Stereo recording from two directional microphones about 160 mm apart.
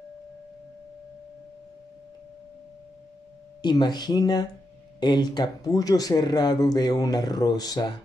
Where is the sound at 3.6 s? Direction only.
25° left (ahead or behind).